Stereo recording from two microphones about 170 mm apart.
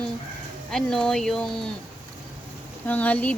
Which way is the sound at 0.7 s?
Centre (ahead or behind).